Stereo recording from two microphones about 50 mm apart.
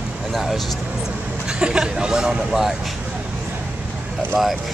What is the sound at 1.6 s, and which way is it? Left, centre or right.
Speech, centre.